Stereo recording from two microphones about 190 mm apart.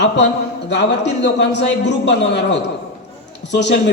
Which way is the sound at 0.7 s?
65° left (ahead or behind).